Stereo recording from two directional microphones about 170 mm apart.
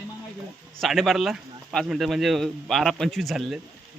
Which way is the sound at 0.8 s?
Centre (ahead or behind).